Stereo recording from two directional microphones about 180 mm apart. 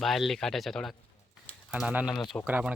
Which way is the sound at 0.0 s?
Centre (ahead or behind).